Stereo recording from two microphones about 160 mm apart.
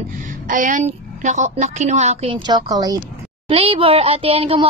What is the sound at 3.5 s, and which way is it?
A woman's voice, 35° right (ahead or behind).